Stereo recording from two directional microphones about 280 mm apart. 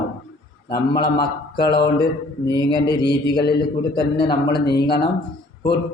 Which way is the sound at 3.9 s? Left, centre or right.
Centre.